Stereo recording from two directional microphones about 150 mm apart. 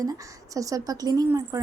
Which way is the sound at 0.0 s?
25° right (ahead or behind).